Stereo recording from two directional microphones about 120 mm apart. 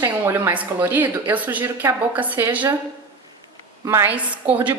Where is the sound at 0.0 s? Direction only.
20° right (ahead or behind).